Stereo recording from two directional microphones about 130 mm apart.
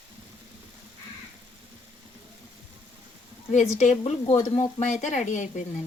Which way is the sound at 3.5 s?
70° left (ahead or behind).